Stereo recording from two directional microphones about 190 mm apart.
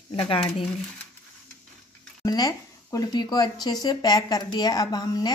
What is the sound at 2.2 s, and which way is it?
Speech, 20° left (ahead or behind).